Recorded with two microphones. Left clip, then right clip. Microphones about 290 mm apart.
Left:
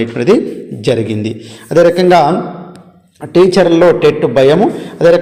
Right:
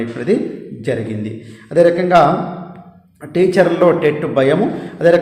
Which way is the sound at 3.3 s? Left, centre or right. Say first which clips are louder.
Left 5 dB; centre.